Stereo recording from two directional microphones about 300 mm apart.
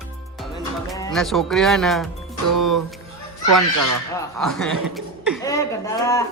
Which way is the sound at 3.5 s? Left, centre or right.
Right.